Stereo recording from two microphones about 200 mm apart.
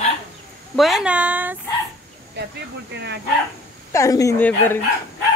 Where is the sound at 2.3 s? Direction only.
55° right (ahead or behind).